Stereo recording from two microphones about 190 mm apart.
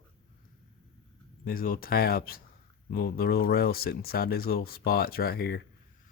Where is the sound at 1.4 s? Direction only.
50° left (ahead or behind).